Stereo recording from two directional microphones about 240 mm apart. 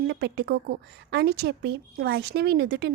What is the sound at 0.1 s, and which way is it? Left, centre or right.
A woman's voice, right.